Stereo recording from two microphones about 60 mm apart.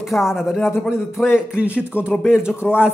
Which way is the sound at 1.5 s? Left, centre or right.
Right.